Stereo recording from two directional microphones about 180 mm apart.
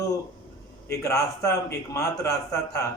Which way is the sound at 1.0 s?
15° left (ahead or behind).